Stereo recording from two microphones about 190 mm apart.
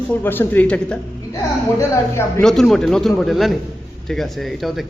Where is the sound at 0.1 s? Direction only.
10° left (ahead or behind).